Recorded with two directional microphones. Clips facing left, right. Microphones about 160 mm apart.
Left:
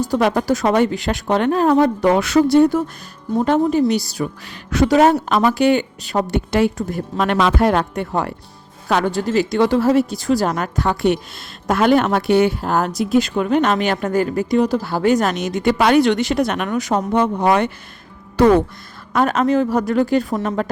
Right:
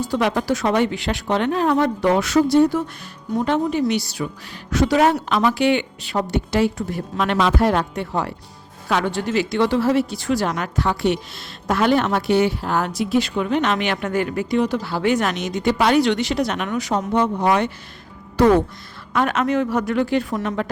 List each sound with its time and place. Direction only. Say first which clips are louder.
0.0 s a woman's voice: left 3 dB; 45° left (ahead or behind)
3.4 s a man's voice: left 4 dB; 40° left (ahead or behind)
4.4 s a woman's voice: left 3 dB; 60° left (ahead or behind)
18.4 s a woman's voice: left 2 dB; 70° left (ahead or behind)
19.1 s a man's voice: left 3 dB; 35° left (ahead or behind)